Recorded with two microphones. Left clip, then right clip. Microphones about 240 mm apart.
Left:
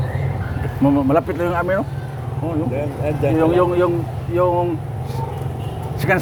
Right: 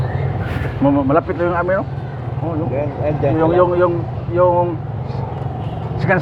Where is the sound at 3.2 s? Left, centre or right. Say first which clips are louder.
Right 2 dB; left.